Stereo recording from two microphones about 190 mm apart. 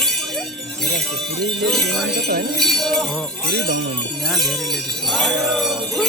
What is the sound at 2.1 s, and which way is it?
Music, 55° right (ahead or behind).